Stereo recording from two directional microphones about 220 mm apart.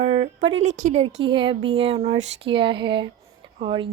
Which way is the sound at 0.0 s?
30° right (ahead or behind).